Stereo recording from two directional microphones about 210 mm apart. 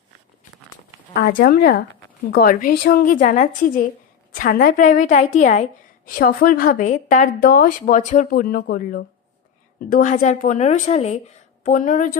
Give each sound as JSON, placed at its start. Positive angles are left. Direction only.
{"t": 1.1, "sound": "a woman's voice", "side_deg": 45}